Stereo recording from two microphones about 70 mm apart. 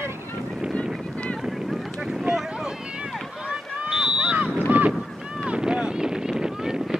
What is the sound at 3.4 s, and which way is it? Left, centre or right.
Run, centre.